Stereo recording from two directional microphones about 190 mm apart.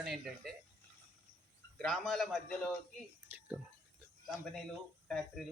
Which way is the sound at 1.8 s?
Centre (ahead or behind).